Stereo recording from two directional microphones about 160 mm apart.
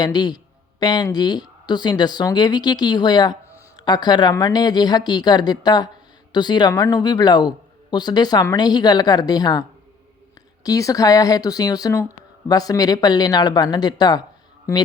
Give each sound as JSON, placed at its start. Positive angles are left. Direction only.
{"t": 0.0, "sound": "speech", "side_deg": 25}